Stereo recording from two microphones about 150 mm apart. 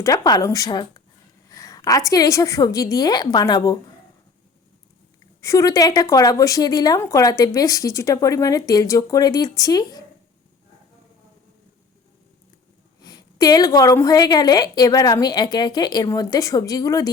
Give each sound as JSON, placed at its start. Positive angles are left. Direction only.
{"t": 0.0, "sound": "speech", "side_deg": 25}
{"t": 5.4, "sound": "speech", "side_deg": 20}
{"t": 13.0, "sound": "speech", "side_deg": 25}